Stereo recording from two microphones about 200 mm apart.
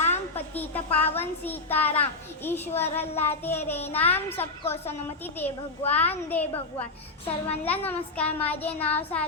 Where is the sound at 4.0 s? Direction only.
10° left (ahead or behind).